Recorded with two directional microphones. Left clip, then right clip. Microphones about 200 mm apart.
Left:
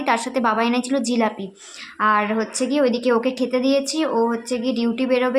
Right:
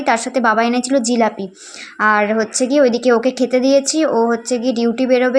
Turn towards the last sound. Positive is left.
turn(degrees=-15)  # may be behind; listen again after turning